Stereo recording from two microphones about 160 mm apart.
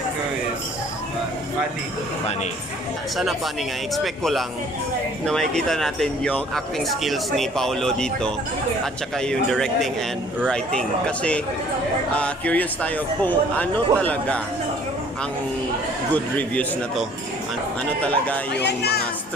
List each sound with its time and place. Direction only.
3.2 s a man's voice: centre (ahead or behind)
16.1 s a man's voice: 10° left (ahead or behind)
18.0 s a man's voice: 10° left (ahead or behind)
18.6 s speech: 90° left